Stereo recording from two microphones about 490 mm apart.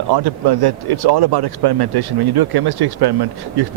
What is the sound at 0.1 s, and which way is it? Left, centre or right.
Speech, right.